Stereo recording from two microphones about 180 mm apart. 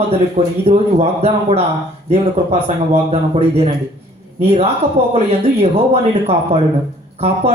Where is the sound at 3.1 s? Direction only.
35° right (ahead or behind).